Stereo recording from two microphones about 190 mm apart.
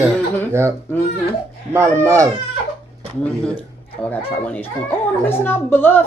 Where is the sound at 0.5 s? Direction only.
15° right (ahead or behind).